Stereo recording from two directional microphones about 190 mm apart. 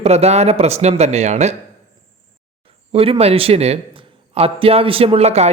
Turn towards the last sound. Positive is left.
turn(degrees=-35)  # may be behind; listen again after turning